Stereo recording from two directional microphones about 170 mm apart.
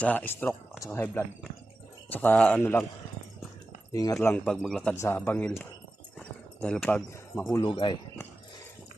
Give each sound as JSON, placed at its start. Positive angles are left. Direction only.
{"t": 0.0, "sound": "speech", "side_deg": 10}
{"t": 3.9, "sound": "speech", "side_deg": 20}
{"t": 6.1, "sound": "a sound", "side_deg": 5}
{"t": 7.6, "sound": "speech", "side_deg": 30}